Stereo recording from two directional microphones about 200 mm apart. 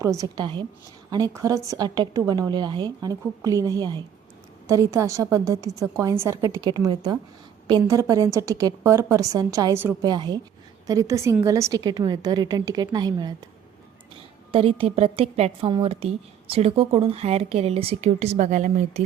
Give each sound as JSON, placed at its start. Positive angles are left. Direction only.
{"t": 0.0, "sound": "a woman's voice", "side_deg": -15}
{"t": 14.5, "sound": "a woman's voice", "side_deg": -30}